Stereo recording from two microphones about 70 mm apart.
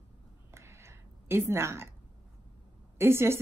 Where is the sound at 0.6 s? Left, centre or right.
Right.